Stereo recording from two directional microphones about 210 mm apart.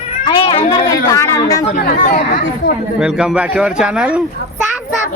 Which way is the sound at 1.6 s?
35° left (ahead or behind).